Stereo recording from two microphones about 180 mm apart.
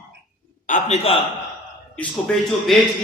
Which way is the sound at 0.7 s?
35° left (ahead or behind).